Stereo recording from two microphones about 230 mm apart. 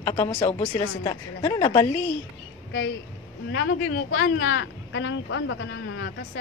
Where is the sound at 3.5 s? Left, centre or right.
Left.